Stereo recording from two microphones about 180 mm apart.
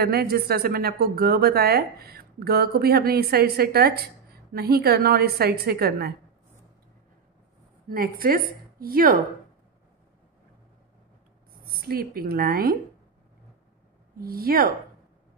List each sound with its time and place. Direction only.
0.0 s a woman's voice: 60° right (ahead or behind)
7.9 s a woman's voice: 55° right (ahead or behind)
11.5 s speech: 55° right (ahead or behind)
14.1 s a woman's voice: 55° right (ahead or behind)